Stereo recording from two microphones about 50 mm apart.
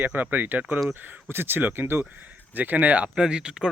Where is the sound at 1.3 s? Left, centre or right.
Right.